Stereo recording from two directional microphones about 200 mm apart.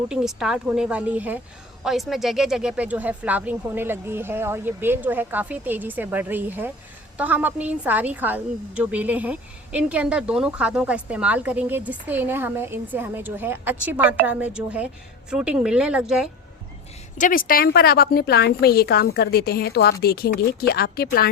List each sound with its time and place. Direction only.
0.1 s a woman's voice: 5° right (ahead or behind)
17.2 s a woman's voice: 45° left (ahead or behind)